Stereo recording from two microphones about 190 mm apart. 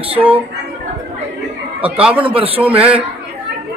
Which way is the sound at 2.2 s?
30° right (ahead or behind).